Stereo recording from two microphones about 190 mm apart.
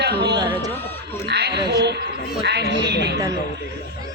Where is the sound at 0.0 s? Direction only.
60° right (ahead or behind).